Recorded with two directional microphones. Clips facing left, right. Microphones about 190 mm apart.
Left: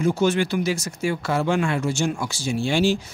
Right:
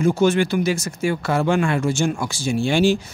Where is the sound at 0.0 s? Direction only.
50° right (ahead or behind).